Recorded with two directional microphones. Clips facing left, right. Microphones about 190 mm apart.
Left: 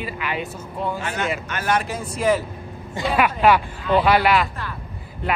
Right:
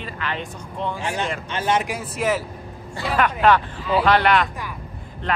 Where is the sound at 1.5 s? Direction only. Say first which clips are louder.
Right 3 dB; 25° right (ahead or behind).